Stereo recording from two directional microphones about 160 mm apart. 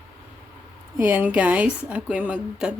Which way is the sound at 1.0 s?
10° right (ahead or behind).